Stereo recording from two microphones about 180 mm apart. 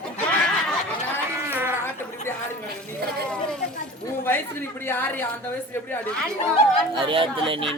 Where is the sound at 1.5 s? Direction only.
10° right (ahead or behind).